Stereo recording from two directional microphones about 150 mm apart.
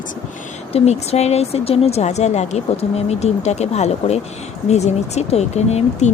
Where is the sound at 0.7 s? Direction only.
45° left (ahead or behind).